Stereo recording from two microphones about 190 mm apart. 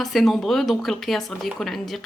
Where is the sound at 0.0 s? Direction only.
Centre (ahead or behind).